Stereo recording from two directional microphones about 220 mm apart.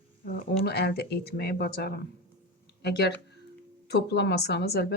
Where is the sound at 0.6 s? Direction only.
45° left (ahead or behind).